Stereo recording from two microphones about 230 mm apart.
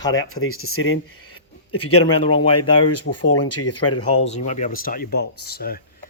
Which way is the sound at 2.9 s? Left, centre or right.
Left.